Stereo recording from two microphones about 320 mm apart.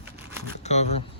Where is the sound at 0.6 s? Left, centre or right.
Left.